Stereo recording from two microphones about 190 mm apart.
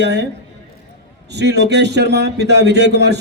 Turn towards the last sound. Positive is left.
turn(degrees=-65)  # may be behind; listen again after turning